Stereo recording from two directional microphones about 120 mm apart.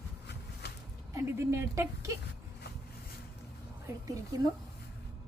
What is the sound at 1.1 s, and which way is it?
A woman's voice, 25° right (ahead or behind).